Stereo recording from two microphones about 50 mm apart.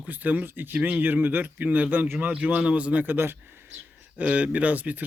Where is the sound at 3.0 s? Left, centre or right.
Right.